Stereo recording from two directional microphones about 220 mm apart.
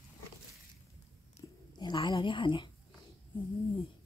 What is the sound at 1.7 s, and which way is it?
Speech, 20° left (ahead or behind).